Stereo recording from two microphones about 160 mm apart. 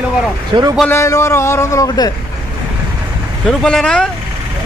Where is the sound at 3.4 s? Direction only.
5° left (ahead or behind).